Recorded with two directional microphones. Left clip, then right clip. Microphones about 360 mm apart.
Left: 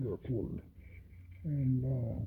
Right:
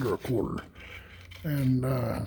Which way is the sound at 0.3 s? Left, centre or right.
Centre.